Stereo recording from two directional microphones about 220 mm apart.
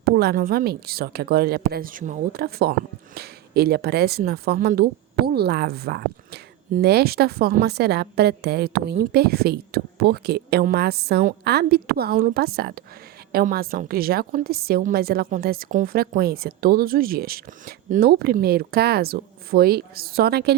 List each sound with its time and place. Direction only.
0.0 s speech: 45° right (ahead or behind)